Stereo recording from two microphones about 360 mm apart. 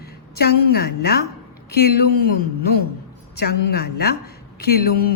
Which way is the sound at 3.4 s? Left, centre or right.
Left.